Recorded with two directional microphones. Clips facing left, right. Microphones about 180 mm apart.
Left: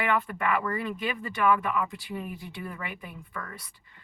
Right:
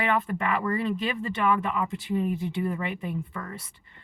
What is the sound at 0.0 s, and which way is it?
Speech, 25° right (ahead or behind).